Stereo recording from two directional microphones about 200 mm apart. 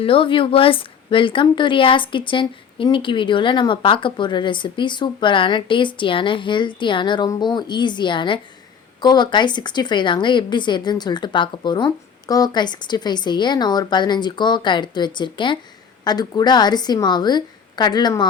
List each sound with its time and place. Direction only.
0.0 s a woman's voice: 25° left (ahead or behind)